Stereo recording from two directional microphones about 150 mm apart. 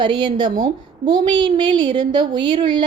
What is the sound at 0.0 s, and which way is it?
A woman's voice, 30° right (ahead or behind).